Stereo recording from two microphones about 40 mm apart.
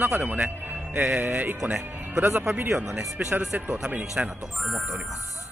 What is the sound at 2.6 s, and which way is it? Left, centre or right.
Speech, right.